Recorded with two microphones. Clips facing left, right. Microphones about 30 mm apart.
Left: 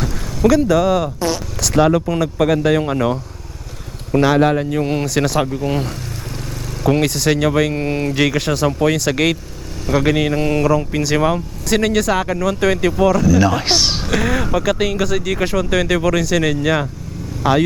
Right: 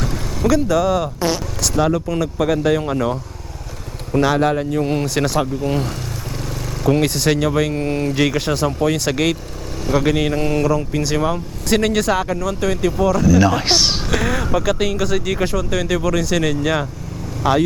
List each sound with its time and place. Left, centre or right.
0.0 s vehicle: centre
1.2 s a sound: centre
1.8 s speech: left
2.0 s speech: centre
5.0 s speech: centre
5.4 s speech: centre
7.1 s speech: centre
7.3 s speech: centre
8.6 s speech: centre
11.7 s speech: centre
13.1 s speech: centre
15.4 s speech: centre